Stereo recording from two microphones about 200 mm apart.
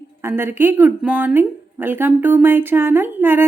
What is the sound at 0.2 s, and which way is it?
A woman's voice, 10° right (ahead or behind).